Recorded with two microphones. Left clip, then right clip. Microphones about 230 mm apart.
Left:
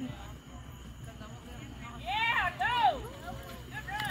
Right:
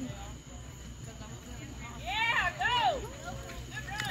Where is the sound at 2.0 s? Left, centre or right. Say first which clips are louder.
Even; right.